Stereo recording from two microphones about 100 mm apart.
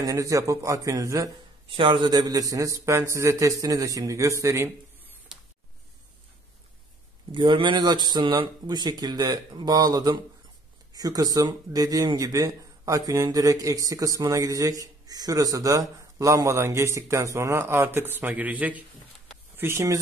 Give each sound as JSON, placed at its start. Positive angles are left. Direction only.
{"t": 0.0, "sound": "speech", "side_deg": -35}
{"t": 1.8, "sound": "speech", "side_deg": -50}
{"t": 7.3, "sound": "speech", "side_deg": -55}